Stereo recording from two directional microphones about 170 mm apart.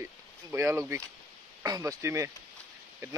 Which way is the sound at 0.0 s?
15° right (ahead or behind).